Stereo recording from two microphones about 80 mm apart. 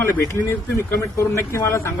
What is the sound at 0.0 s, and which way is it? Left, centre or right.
A man's voice, left.